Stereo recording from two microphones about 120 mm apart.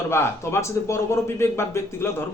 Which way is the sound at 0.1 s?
20° left (ahead or behind).